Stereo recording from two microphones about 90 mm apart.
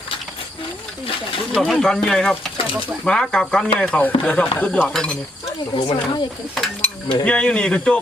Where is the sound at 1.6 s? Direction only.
Centre (ahead or behind).